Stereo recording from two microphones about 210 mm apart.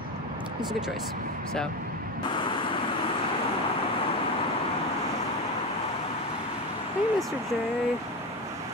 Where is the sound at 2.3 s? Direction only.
25° left (ahead or behind).